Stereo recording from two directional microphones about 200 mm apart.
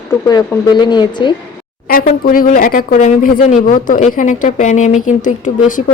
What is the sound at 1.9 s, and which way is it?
Speech, 45° left (ahead or behind).